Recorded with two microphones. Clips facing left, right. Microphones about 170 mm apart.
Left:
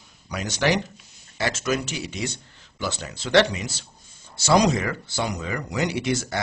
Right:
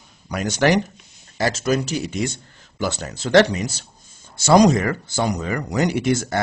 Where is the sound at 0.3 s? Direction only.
50° right (ahead or behind).